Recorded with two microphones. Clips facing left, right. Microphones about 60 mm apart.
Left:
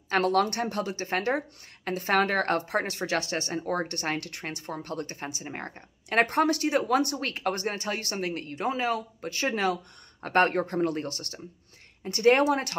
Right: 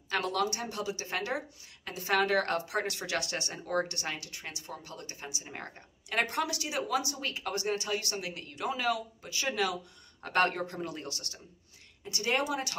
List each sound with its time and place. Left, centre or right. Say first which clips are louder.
0.1 s a woman's voice: left 7 dB; left